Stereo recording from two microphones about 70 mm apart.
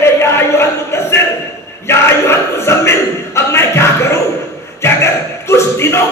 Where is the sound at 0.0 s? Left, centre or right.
Left.